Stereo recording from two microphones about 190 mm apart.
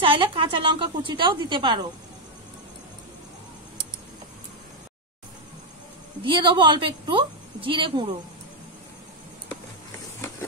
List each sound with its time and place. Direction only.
0.0 s a woman's voice: 25° right (ahead or behind)
6.2 s a woman's voice: 25° right (ahead or behind)